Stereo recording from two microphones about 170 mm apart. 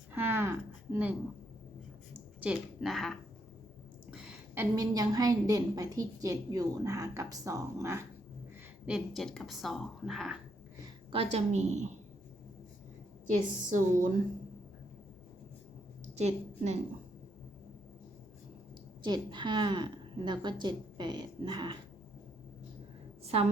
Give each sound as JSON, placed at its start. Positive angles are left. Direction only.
{"t": 0.1, "sound": "a sound", "side_deg": -10}
{"t": 2.4, "sound": "speech", "side_deg": -5}
{"t": 4.1, "sound": "a sound", "side_deg": -5}
{"t": 4.6, "sound": "a woman's voice", "side_deg": -20}
{"t": 8.9, "sound": "speech", "side_deg": 0}
{"t": 11.1, "sound": "a woman's voice", "side_deg": -35}
{"t": 13.7, "sound": "speech", "side_deg": -50}
{"t": 16.1, "sound": "a woman's voice", "side_deg": -40}
{"t": 19.0, "sound": "a woman's voice", "side_deg": -25}
{"t": 23.2, "sound": "a woman's voice", "side_deg": -35}